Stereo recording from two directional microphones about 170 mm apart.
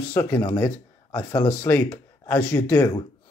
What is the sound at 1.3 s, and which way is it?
Speech, 25° left (ahead or behind).